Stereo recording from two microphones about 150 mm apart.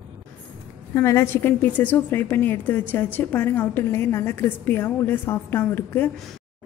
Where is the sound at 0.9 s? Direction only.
20° left (ahead or behind).